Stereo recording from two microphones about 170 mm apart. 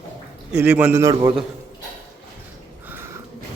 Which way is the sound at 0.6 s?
5° right (ahead or behind).